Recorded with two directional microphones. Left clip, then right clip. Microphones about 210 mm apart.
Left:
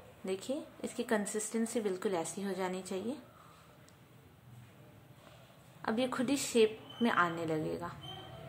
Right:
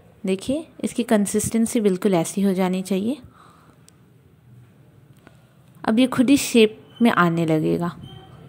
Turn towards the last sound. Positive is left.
turn(degrees=-35)  # may be behind; listen again after turning